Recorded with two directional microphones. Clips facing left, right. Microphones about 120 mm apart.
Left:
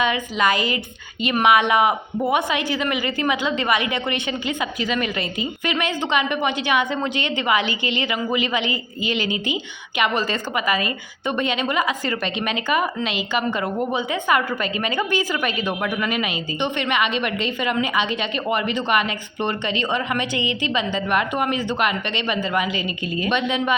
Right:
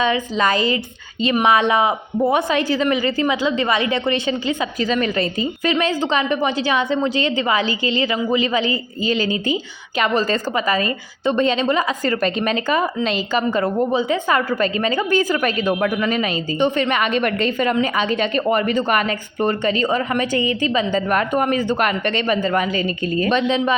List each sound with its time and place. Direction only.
0.0 s a woman's voice: 30° right (ahead or behind)